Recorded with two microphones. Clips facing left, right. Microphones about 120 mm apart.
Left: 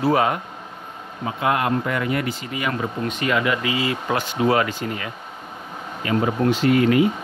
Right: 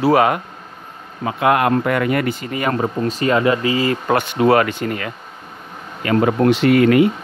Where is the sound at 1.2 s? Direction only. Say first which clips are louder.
Right 6 dB; 70° right (ahead or behind).